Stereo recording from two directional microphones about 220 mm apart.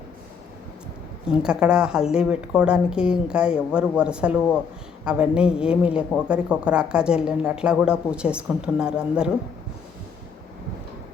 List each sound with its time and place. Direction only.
1.4 s a woman's voice: 5° right (ahead or behind)